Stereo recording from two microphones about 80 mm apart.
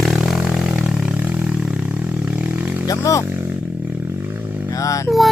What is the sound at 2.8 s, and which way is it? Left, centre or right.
Speech, left.